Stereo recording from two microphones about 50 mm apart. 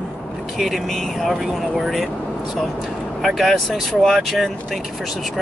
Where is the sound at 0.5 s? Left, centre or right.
Centre.